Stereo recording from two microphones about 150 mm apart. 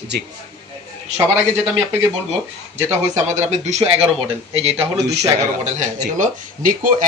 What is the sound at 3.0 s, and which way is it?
Speech, 45° right (ahead or behind).